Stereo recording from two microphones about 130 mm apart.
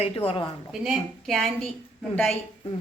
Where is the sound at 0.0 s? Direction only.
45° left (ahead or behind).